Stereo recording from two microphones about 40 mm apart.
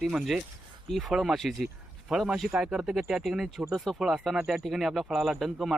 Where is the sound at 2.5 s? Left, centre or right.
Centre.